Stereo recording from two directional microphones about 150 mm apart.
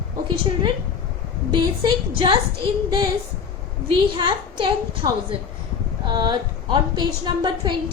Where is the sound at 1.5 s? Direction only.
30° right (ahead or behind).